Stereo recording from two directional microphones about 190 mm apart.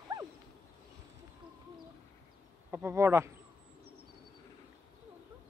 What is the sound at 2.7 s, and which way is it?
Speech, 15° right (ahead or behind).